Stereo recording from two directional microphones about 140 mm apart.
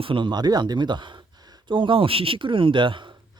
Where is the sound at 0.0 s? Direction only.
35° right (ahead or behind).